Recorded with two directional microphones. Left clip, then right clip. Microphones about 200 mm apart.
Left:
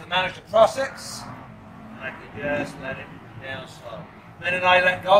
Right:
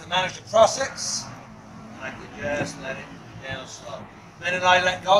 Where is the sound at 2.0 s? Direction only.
5° left (ahead or behind).